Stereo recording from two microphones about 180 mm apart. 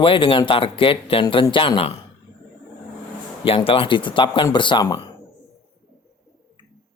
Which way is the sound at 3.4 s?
30° left (ahead or behind).